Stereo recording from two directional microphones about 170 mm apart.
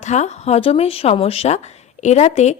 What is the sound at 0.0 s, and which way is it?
A woman's voice, 45° left (ahead or behind).